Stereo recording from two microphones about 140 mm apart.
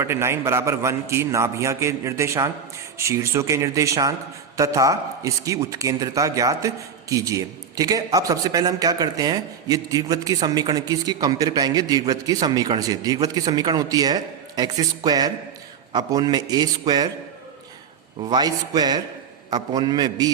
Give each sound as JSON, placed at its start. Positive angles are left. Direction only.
{"t": 0.0, "sound": "speech", "side_deg": -20}
{"t": 18.2, "sound": "speech", "side_deg": -30}